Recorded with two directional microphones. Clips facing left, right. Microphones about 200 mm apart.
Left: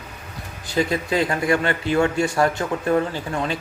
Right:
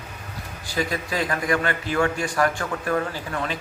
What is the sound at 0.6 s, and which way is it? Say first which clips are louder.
A man's voice: left 5 dB; 25° left (ahead or behind).